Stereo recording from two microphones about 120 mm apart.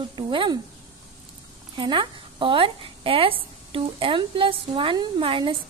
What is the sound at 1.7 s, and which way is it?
A woman's voice, 40° right (ahead or behind).